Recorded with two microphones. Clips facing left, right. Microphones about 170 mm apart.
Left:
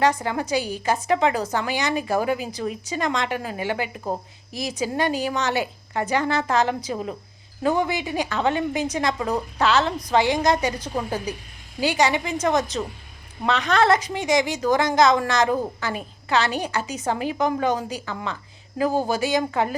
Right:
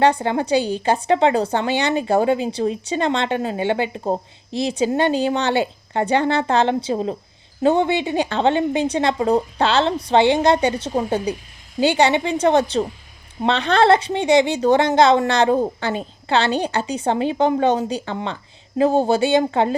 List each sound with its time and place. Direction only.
0.0 s a woman's voice: 30° right (ahead or behind)